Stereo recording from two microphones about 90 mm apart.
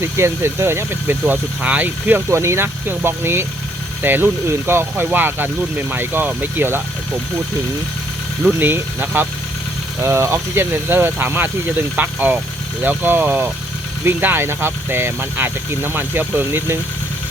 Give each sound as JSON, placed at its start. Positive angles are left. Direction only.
{"t": 0.0, "sound": "speech", "side_deg": -30}
{"t": 8.5, "sound": "speech", "side_deg": -20}